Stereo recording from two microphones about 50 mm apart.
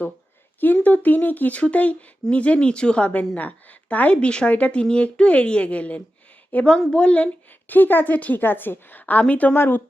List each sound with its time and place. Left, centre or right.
0.6 s a woman's voice: left
7.7 s a woman's voice: left